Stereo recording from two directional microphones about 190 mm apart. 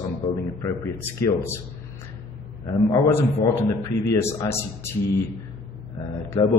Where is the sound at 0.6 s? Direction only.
15° left (ahead or behind).